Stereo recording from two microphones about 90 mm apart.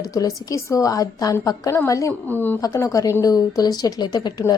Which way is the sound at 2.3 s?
20° left (ahead or behind).